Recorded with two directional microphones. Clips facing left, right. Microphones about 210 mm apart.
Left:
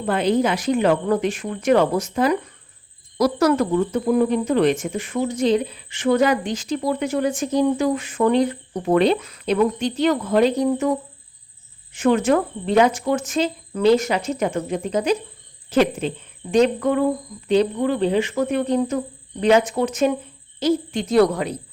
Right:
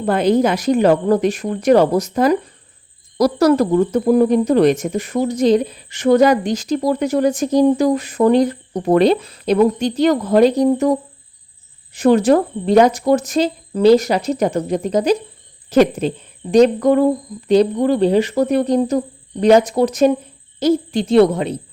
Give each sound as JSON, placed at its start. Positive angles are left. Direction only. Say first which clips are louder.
{"t": 0.0, "sound": "speech", "louder": "right 4 dB", "side_deg": -40}
{"t": 11.9, "sound": "speech", "louder": "right 5 dB", "side_deg": -35}
{"t": 20.6, "sound": "hoot", "louder": "right 4 dB", "side_deg": -40}